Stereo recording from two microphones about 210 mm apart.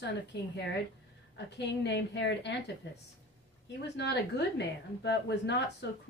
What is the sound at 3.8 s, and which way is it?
A woman's voice, 55° left (ahead or behind).